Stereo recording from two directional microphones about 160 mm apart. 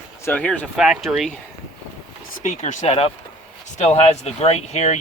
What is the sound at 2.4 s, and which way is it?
Speech, 50° left (ahead or behind).